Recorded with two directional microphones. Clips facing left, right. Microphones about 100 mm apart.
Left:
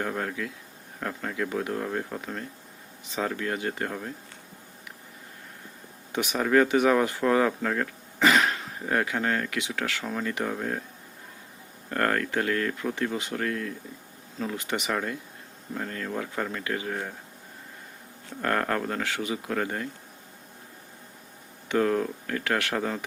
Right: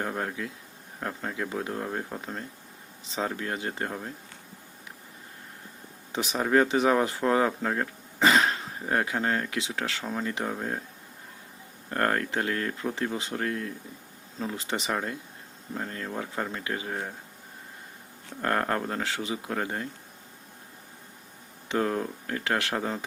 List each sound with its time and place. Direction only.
0.0 s speech: 25° right (ahead or behind)
6.1 s speech: 30° right (ahead or behind)
11.9 s speech: 25° right (ahead or behind)
18.4 s speech: 25° right (ahead or behind)
21.7 s speech: 25° right (ahead or behind)